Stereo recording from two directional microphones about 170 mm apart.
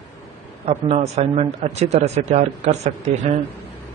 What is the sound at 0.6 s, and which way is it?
A man's voice, 40° right (ahead or behind).